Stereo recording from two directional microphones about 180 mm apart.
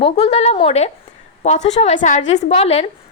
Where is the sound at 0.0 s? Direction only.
35° left (ahead or behind).